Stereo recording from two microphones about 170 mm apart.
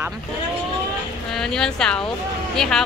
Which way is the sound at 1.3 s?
5° left (ahead or behind).